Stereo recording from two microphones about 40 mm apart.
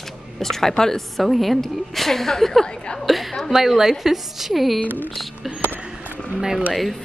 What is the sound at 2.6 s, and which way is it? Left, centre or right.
Speech, centre.